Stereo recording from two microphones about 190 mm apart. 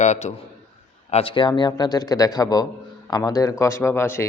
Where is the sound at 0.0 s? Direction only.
35° left (ahead or behind).